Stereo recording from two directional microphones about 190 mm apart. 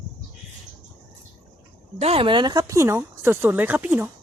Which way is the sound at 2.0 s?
30° right (ahead or behind).